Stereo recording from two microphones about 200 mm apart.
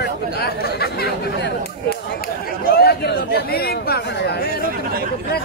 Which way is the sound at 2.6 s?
50° left (ahead or behind).